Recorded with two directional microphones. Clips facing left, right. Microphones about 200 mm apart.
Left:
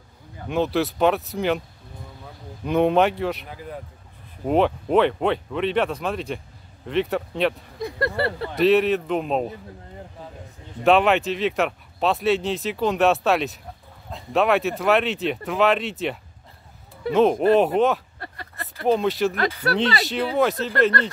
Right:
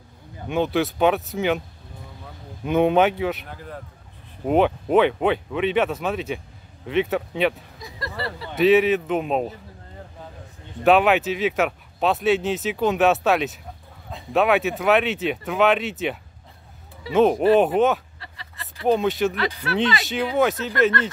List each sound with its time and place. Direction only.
0.5 s speech: centre (ahead or behind)
2.6 s speech: centre (ahead or behind)
7.8 s speech: 60° left (ahead or behind)
8.5 s speech: centre (ahead or behind)
10.8 s speech: centre (ahead or behind)
18.2 s a sound: 50° left (ahead or behind)
18.9 s speech: centre (ahead or behind)
19.3 s speech: 45° left (ahead or behind)
20.1 s speech: centre (ahead or behind)